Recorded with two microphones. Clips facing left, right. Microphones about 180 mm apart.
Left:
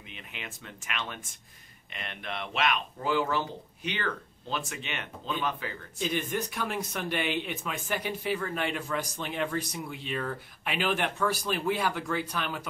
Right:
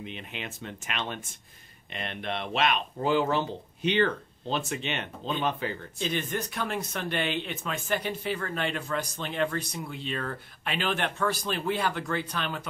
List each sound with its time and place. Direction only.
0.0 s speech: 30° right (ahead or behind)
5.9 s speech: 10° left (ahead or behind)